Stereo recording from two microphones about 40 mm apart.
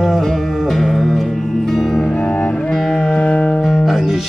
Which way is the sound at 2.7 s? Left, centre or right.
Centre.